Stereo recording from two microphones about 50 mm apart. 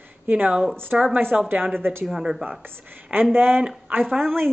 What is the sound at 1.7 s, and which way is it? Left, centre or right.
Speech, right.